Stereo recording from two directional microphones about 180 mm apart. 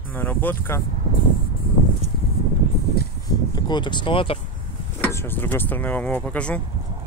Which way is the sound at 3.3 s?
25° left (ahead or behind).